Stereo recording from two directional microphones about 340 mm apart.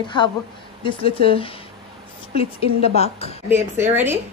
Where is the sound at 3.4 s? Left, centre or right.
Centre.